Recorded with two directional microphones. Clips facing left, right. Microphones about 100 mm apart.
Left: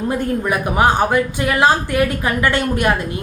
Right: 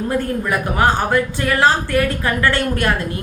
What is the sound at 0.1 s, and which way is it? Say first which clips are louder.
A woman's voice: left 1 dB; 20° left (ahead or behind).